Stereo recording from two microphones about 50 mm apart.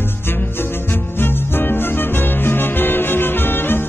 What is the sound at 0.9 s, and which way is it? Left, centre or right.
Music, left.